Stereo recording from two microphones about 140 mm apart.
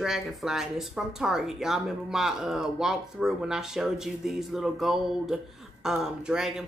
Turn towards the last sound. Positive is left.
turn(degrees=-5)  # may be behind; listen again after turning